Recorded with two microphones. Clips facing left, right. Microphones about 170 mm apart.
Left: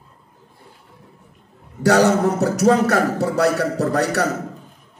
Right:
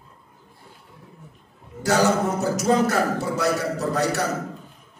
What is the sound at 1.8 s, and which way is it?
A man's voice, 70° left (ahead or behind).